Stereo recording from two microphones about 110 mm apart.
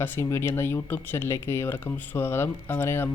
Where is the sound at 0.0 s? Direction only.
25° left (ahead or behind).